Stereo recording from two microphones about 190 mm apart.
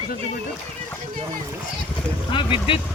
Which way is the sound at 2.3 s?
25° left (ahead or behind).